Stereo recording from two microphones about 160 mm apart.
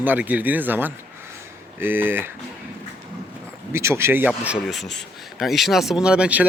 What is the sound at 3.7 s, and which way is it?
Speech, 15° right (ahead or behind).